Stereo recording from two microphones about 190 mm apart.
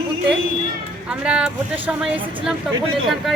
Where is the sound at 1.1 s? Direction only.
5° right (ahead or behind).